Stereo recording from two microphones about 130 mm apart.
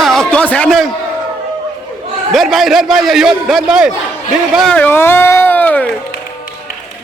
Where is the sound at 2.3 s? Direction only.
Centre (ahead or behind).